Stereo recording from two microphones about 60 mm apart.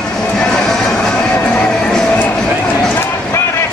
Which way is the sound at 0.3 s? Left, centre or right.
Centre.